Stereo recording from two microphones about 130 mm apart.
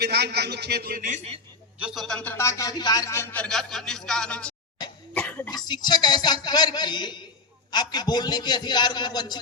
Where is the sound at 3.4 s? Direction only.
5° left (ahead or behind).